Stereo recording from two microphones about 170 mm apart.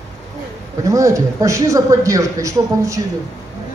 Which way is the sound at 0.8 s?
20° right (ahead or behind).